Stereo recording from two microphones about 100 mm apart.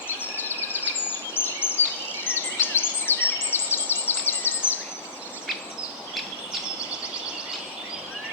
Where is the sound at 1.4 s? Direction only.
20° left (ahead or behind).